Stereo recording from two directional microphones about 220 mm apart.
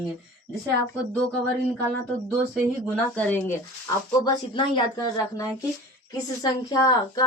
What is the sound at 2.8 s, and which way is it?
Speech, 5° left (ahead or behind).